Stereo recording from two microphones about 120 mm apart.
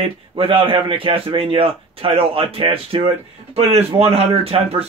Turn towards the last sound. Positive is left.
turn(degrees=-55)  # may be behind; listen again after turning